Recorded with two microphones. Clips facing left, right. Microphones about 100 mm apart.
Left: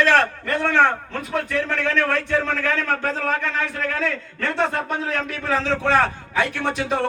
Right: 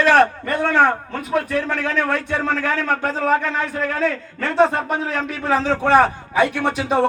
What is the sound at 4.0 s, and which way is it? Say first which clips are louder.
A man's voice: right 3 dB; 35° right (ahead or behind).